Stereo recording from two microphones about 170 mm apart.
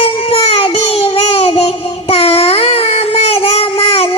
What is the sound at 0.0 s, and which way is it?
Child singing, 35° left (ahead or behind).